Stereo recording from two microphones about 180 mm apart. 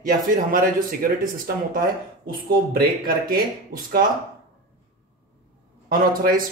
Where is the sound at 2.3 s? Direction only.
55° right (ahead or behind).